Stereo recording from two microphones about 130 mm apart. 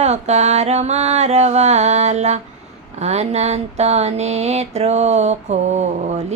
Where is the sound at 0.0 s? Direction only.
60° right (ahead or behind).